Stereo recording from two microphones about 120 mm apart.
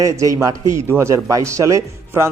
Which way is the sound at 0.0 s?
25° right (ahead or behind).